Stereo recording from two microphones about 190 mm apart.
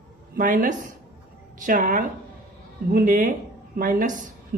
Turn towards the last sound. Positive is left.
turn(degrees=-45)  # may be behind; listen again after turning